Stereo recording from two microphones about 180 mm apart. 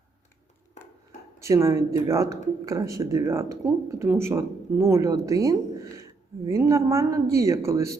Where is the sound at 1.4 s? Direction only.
15° right (ahead or behind).